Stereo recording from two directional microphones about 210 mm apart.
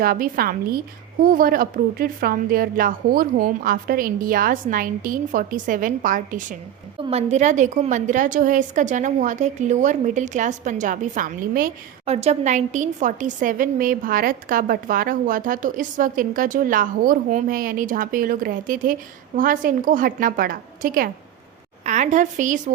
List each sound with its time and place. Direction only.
0.0 s a woman's voice: 45° right (ahead or behind)
12.0 s a woman's voice: 30° right (ahead or behind)